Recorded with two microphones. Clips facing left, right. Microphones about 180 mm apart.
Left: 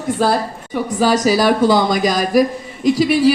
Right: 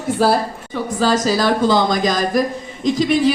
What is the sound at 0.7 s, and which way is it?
Speech, 15° left (ahead or behind).